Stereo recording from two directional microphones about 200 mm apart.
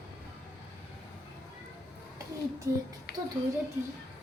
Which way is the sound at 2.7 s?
15° right (ahead or behind).